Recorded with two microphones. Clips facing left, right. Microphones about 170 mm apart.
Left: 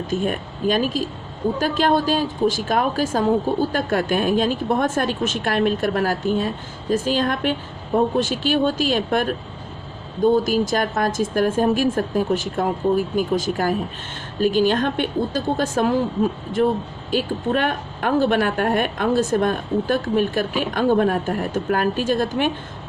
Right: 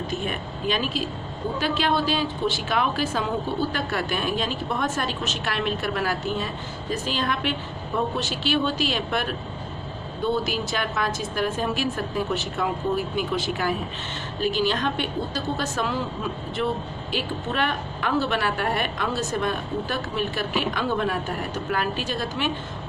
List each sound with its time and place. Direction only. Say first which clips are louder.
0.1 s a woman's voice: left 6 dB; 45° left (ahead or behind)